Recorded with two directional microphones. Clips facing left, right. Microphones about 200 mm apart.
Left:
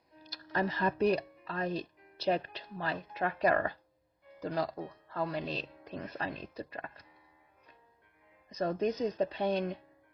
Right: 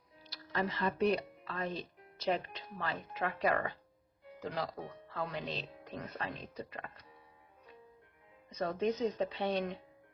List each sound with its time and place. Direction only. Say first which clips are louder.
0.2 s speech: left 3 dB; 45° left (ahead or behind)
8.4 s speech: left 2 dB; 40° left (ahead or behind)